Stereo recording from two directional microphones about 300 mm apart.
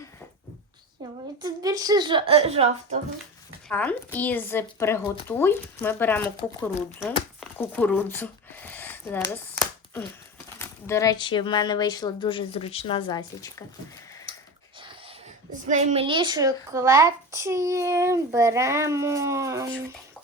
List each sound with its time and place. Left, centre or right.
1.0 s a woman's voice: centre
3.7 s speech: centre
7.0 s a sound: centre
10.6 s speech: centre
14.3 s a sound: centre
15.6 s a woman's voice: right